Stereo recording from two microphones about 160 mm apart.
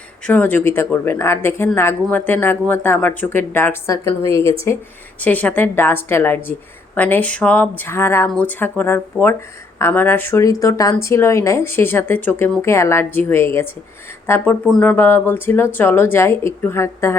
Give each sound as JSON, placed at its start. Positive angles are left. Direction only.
{"t": 0.3, "sound": "speech", "side_deg": 10}